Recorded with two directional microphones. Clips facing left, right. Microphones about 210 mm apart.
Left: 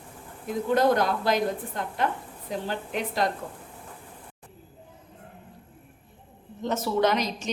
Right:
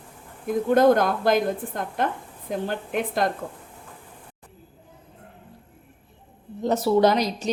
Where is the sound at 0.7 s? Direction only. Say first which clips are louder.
Right 4 dB; 50° right (ahead or behind).